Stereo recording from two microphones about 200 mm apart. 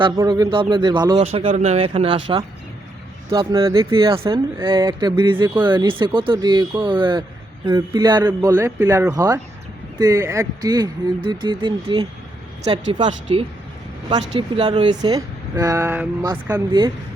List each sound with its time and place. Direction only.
0.0 s speech: 20° right (ahead or behind)
3.3 s speech: 15° right (ahead or behind)